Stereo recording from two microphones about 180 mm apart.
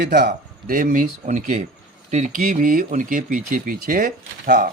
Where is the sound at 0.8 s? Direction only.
45° right (ahead or behind).